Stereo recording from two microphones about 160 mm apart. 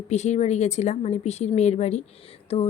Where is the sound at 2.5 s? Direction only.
35° left (ahead or behind).